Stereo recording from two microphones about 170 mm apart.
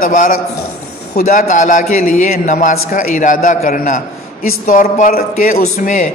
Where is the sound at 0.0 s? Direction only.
50° left (ahead or behind).